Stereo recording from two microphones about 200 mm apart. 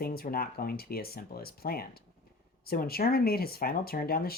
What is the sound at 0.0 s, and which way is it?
Speech, 50° left (ahead or behind).